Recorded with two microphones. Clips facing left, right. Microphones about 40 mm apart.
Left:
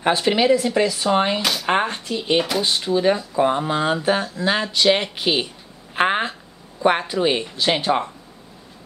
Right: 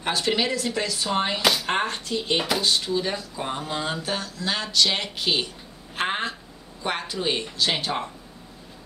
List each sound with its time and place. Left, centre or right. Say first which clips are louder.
0.0 s speech: left 6 dB; centre
1.4 s speech: right 1 dB; centre
1.7 s speech: left 5 dB; centre